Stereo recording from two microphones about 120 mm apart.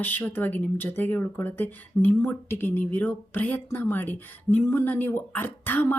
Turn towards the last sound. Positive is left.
turn(degrees=15)  # may be behind; listen again after turning